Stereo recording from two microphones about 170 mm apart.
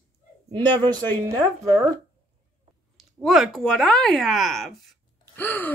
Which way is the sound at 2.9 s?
Centre (ahead or behind).